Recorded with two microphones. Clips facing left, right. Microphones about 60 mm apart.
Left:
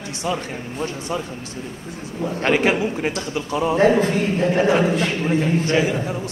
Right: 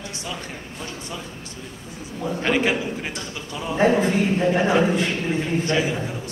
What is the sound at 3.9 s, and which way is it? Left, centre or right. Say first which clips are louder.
A man's voice: left 1 dB; centre.